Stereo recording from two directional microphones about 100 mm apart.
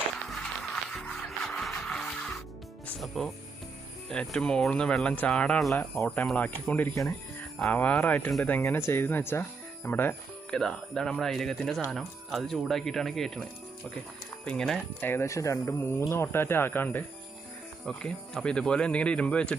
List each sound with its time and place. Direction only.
0.3 s music: 5° left (ahead or behind)
3.0 s speech: centre (ahead or behind); by 10.2 s 20° left (ahead or behind)
10.5 s speech: 5° left (ahead or behind)
15.0 s speech: 25° left (ahead or behind)
17.8 s speech: 5° left (ahead or behind)